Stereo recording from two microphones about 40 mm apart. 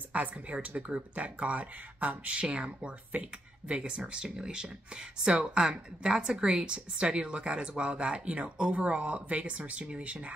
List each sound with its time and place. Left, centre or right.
0.1 s speech: right
2.4 s a woman's voice: right
3.1 s a woman's voice: right